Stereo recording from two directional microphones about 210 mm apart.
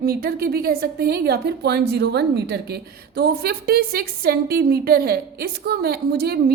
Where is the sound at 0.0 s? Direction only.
45° right (ahead or behind).